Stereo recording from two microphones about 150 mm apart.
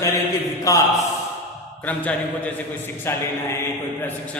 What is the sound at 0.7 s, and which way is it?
Speech, 20° left (ahead or behind).